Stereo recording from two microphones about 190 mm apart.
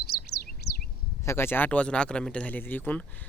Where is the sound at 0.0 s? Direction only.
55° left (ahead or behind).